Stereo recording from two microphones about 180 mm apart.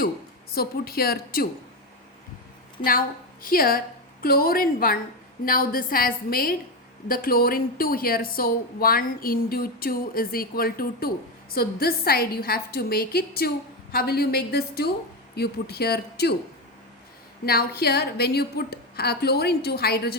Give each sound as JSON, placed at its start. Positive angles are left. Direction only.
{"t": 0.5, "sound": "a woman's voice", "side_deg": 55}
{"t": 3.4, "sound": "a woman's voice", "side_deg": 55}
{"t": 17.4, "sound": "a woman's voice", "side_deg": 55}